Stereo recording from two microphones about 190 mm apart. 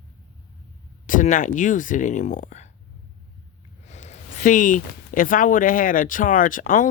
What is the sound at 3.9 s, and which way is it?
Speech, 35° left (ahead or behind).